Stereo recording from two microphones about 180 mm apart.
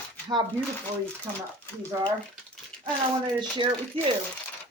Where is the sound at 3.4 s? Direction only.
25° right (ahead or behind).